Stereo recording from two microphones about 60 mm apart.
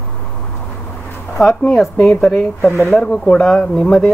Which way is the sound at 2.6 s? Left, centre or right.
Left.